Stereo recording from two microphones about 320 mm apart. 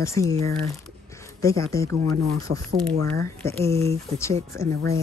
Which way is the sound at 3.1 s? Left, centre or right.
Centre.